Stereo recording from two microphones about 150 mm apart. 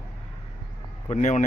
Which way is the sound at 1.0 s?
50° left (ahead or behind).